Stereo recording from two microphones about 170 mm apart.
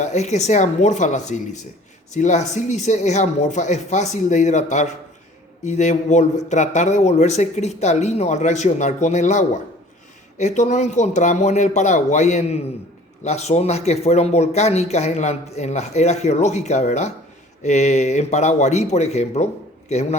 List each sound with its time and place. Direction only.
0.0 s speech: 45° left (ahead or behind)